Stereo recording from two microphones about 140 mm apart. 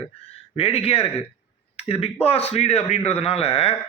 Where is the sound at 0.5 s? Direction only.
45° left (ahead or behind).